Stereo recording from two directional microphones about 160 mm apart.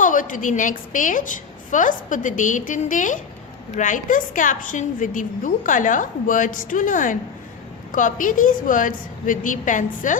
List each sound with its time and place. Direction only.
0.0 s a woman's voice: 55° left (ahead or behind)